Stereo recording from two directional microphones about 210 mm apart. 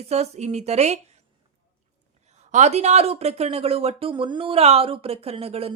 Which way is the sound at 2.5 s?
35° right (ahead or behind).